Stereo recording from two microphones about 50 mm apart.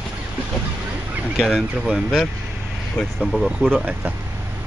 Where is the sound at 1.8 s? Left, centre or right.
Centre.